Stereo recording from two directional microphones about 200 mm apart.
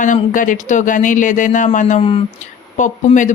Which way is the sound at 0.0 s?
40° left (ahead or behind).